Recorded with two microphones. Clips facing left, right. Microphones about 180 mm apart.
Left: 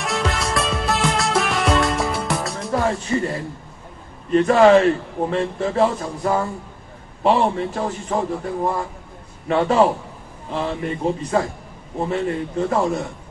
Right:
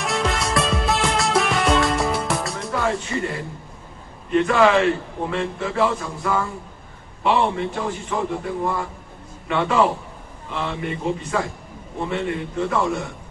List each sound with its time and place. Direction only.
0.0 s music: centre (ahead or behind)
2.7 s music: 35° left (ahead or behind)
4.3 s a man's voice: 35° left (ahead or behind)
9.5 s a man's voice: 35° left (ahead or behind)